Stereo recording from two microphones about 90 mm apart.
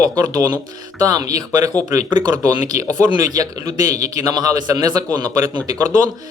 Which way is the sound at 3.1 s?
45° right (ahead or behind).